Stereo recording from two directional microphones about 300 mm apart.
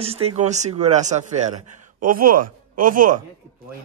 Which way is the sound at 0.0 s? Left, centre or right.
Centre.